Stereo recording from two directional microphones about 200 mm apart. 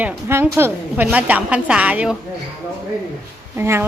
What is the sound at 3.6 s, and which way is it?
Speech, 10° right (ahead or behind).